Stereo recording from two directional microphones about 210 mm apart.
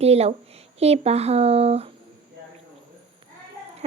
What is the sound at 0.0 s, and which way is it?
Speech, 30° right (ahead or behind).